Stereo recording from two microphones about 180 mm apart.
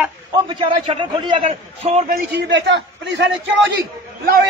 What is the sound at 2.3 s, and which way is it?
Speech, 75° right (ahead or behind).